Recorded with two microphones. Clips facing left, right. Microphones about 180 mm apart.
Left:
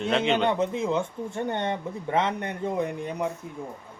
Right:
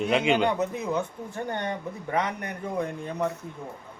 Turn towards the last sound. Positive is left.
turn(degrees=15)  # may be behind; listen again after turning